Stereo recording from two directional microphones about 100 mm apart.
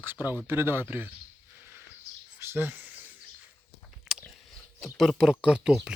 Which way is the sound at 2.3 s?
25° right (ahead or behind).